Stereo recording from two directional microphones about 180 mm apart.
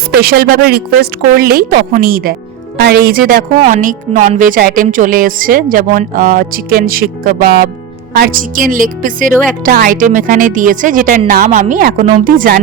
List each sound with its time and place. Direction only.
0.1 s speech: 55° right (ahead or behind)